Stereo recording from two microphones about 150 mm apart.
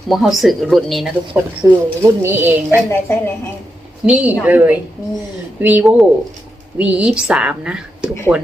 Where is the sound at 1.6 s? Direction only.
20° right (ahead or behind).